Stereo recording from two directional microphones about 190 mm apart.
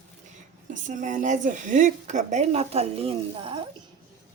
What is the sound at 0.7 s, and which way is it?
Speech, 40° right (ahead or behind).